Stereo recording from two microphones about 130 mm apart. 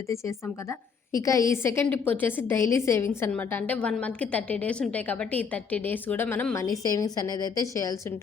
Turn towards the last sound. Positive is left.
turn(degrees=25)  # may be behind; listen again after turning